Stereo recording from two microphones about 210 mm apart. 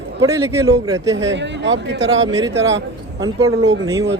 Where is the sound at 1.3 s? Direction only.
60° right (ahead or behind).